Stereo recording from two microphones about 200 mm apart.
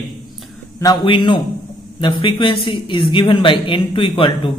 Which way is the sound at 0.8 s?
20° left (ahead or behind).